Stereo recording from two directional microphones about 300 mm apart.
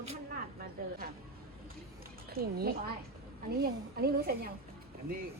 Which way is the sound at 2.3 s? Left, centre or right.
Right.